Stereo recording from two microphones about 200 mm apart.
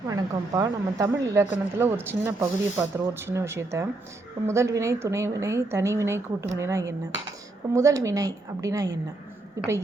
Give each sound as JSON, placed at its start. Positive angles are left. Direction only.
{"t": 0.1, "sound": "speech", "side_deg": -20}